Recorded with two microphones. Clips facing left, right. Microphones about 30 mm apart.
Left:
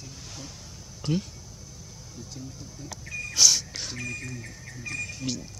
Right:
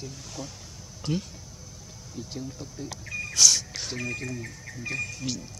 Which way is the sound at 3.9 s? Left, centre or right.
Centre.